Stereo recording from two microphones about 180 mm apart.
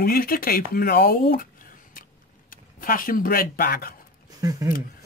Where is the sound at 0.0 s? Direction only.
55° left (ahead or behind).